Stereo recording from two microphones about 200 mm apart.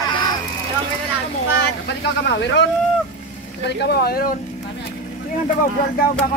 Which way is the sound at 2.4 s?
60° left (ahead or behind).